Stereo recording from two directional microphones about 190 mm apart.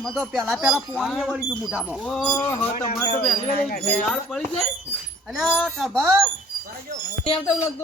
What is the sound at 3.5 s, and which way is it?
Speech, 50° left (ahead or behind).